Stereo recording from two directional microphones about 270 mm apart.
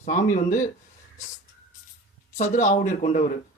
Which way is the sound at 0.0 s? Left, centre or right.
Left.